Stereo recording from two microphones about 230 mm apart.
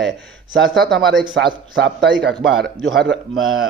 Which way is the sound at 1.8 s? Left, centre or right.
Right.